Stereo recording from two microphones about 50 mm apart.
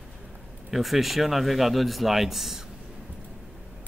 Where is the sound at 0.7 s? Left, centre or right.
Centre.